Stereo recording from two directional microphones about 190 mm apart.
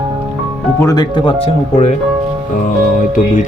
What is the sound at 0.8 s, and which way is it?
Speech, 20° left (ahead or behind).